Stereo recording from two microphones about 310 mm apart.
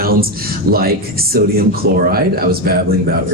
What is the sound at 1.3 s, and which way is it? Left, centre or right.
Speech, right.